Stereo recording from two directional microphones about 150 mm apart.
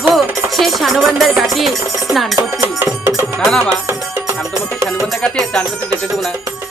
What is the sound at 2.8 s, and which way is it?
Music, 15° right (ahead or behind).